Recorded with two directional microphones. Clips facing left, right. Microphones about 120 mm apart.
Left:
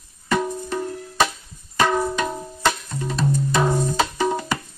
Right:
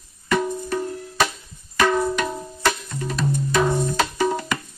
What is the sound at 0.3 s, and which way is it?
Music, 10° left (ahead or behind).